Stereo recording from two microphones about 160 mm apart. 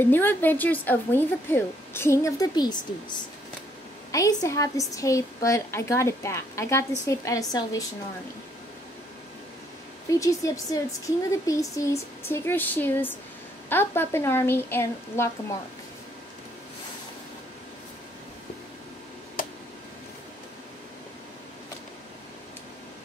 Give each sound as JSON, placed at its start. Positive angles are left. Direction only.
{"t": 0.0, "sound": "a woman's voice", "side_deg": 10}
{"t": 10.0, "sound": "a woman's voice", "side_deg": 20}